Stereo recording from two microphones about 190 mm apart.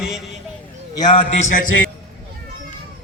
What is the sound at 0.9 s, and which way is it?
Speech, 25° left (ahead or behind).